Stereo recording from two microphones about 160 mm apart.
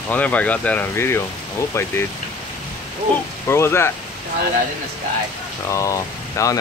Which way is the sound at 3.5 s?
15° left (ahead or behind).